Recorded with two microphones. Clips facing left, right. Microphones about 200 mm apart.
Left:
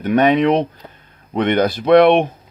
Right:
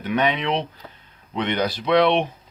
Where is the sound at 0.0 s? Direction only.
50° left (ahead or behind).